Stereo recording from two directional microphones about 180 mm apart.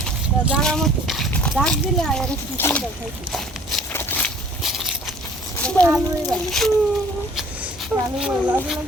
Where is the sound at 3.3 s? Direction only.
Centre (ahead or behind).